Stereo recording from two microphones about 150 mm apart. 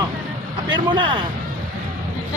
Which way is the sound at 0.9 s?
35° right (ahead or behind).